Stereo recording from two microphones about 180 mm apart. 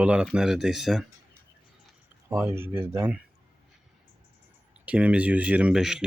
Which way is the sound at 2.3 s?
15° right (ahead or behind).